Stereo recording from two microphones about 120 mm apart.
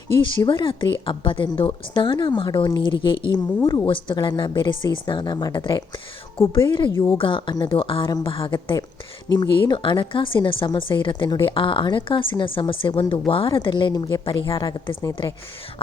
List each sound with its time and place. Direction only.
0.2 s a woman's voice: 40° left (ahead or behind)
6.9 s speech: 20° left (ahead or behind)
7.2 s a woman's voice: 45° left (ahead or behind)